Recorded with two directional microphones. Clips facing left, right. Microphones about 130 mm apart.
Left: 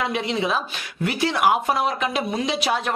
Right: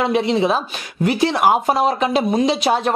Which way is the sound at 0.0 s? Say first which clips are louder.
Right 7 dB; 35° right (ahead or behind).